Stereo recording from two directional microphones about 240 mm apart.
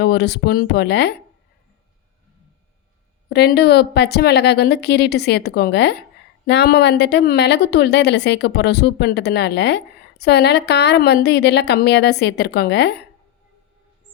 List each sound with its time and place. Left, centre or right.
0.0 s a woman's voice: left
3.2 s a woman's voice: left